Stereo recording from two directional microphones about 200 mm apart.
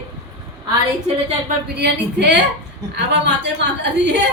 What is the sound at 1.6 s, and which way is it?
A woman's voice, 55° right (ahead or behind).